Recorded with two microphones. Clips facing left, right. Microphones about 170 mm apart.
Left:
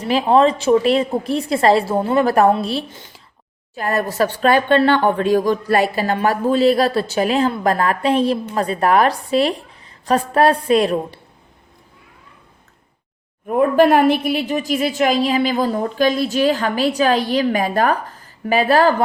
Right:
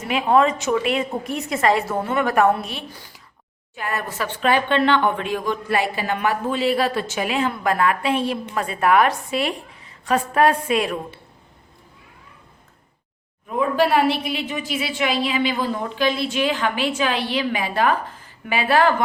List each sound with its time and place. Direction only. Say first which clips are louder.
0.0 s a woman's voice: left 4 dB; 30° left (ahead or behind)
3.8 s speech: left 8 dB; 40° left (ahead or behind)
13.5 s speech: left 6 dB; 50° left (ahead or behind); by 19.0 s 35° left (ahead or behind)